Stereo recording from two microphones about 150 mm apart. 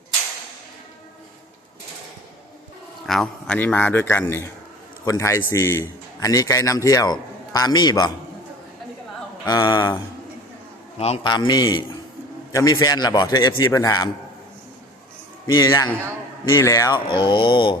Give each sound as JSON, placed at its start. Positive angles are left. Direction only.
{"t": 3.1, "sound": "a man's voice", "side_deg": 5}
{"t": 9.5, "sound": "a man's voice", "side_deg": 30}
{"t": 10.9, "sound": "a man's voice", "side_deg": 40}
{"t": 11.3, "sound": "a man's voice", "side_deg": 30}
{"t": 15.5, "sound": "a man's voice", "side_deg": 25}
{"t": 17.1, "sound": "speech", "side_deg": 30}